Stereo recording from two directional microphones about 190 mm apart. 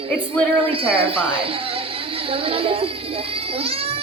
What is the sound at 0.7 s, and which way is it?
Music, 30° right (ahead or behind).